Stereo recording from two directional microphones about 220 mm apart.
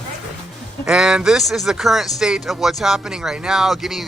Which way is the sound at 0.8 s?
Centre (ahead or behind).